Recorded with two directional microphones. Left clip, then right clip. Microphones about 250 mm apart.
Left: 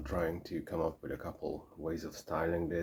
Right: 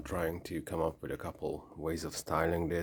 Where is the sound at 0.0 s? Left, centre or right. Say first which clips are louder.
Even; right.